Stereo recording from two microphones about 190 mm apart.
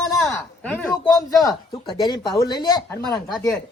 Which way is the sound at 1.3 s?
20° left (ahead or behind).